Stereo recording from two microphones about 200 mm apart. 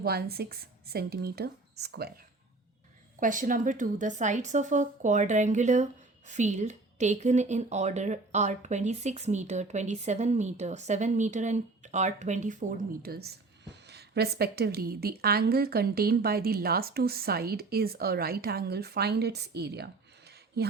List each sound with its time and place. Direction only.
0.0 s a woman's voice: 50° right (ahead or behind)
3.2 s a woman's voice: 40° right (ahead or behind)